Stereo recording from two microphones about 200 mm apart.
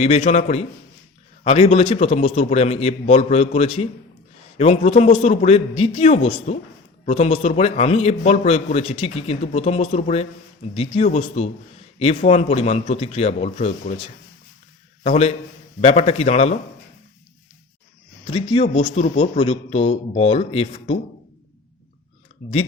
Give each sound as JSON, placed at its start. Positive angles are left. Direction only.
{"t": 0.0, "sound": "a man's voice", "side_deg": 30}
{"t": 1.5, "sound": "a man's voice", "side_deg": 25}
{"t": 2.0, "sound": "a man's voice", "side_deg": 35}
{"t": 15.0, "sound": "a man's voice", "side_deg": 35}
{"t": 18.3, "sound": "a man's voice", "side_deg": 30}